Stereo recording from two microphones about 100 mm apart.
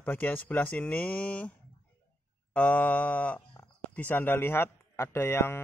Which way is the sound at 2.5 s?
15° left (ahead or behind).